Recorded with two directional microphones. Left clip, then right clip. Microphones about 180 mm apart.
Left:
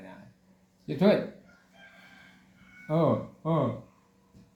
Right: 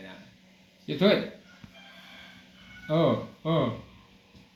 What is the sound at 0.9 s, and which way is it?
Speech, 80° left.